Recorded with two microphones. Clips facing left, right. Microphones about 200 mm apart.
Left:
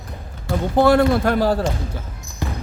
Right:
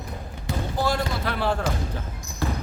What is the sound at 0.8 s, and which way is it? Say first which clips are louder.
Speech: left 13 dB; 60° left (ahead or behind).